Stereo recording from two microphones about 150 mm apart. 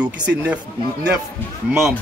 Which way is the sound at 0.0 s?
10° right (ahead or behind).